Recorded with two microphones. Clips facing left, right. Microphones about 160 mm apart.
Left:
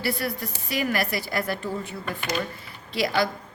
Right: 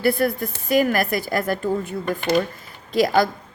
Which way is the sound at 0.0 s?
50° right (ahead or behind).